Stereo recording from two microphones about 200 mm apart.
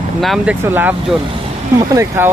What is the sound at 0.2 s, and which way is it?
Speech, centre (ahead or behind).